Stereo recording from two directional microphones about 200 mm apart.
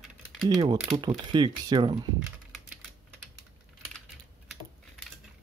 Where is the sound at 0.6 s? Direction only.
20° right (ahead or behind).